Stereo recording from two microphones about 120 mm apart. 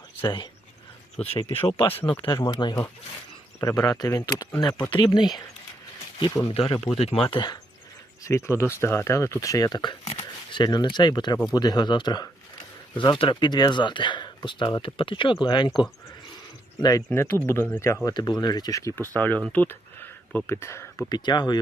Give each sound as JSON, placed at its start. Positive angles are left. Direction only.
{"t": 1.2, "sound": "speech", "side_deg": 50}
{"t": 2.2, "sound": "speech", "side_deg": 40}
{"t": 6.5, "sound": "speech", "side_deg": 55}
{"t": 8.2, "sound": "speech", "side_deg": 25}
{"t": 17.1, "sound": "speech", "side_deg": 20}
{"t": 18.0, "sound": "speech", "side_deg": 35}
{"t": 19.0, "sound": "speech", "side_deg": 15}
{"t": 19.5, "sound": "a sound", "side_deg": 15}
{"t": 21.1, "sound": "speech", "side_deg": 35}